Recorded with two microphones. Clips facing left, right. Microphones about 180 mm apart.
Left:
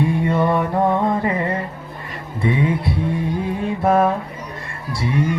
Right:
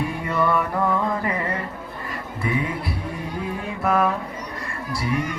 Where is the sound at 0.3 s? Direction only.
30° left (ahead or behind).